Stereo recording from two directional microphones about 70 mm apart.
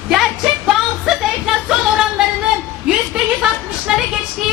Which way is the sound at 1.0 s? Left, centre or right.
Centre.